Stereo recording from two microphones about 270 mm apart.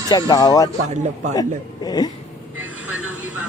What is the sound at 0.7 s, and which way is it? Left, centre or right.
Speech, right.